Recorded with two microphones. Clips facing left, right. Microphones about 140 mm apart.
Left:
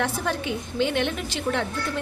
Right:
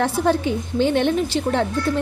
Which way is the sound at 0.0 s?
30° right (ahead or behind).